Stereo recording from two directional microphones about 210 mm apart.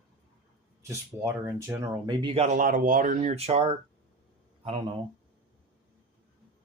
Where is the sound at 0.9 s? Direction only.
15° right (ahead or behind); by 3.8 s 30° right (ahead or behind).